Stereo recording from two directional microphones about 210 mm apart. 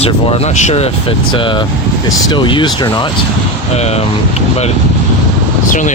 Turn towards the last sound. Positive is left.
turn(degrees=35)  # may be behind; listen again after turning